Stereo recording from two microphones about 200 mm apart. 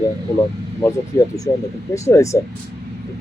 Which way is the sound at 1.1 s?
15° left (ahead or behind).